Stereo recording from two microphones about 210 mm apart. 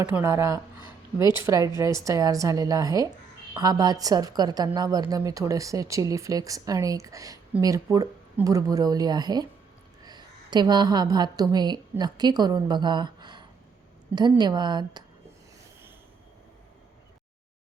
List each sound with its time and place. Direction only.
0.0 s a woman's voice: 10° right (ahead or behind)